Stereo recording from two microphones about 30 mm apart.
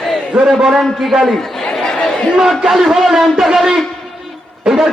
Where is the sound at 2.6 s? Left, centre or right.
Centre.